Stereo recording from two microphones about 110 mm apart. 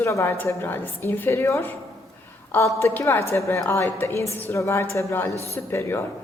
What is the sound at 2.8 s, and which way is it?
A woman's voice, 20° left (ahead or behind).